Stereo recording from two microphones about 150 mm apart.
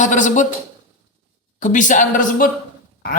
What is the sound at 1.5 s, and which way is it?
Speech, 55° left (ahead or behind).